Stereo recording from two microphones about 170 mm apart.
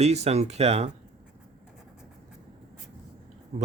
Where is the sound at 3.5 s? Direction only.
40° right (ahead or behind).